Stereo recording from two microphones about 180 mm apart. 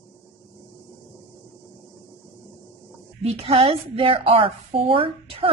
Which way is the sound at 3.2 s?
35° right (ahead or behind).